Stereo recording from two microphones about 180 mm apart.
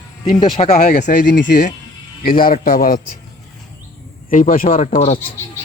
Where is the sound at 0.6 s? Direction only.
40° left (ahead or behind); by 3.0 s 55° left (ahead or behind).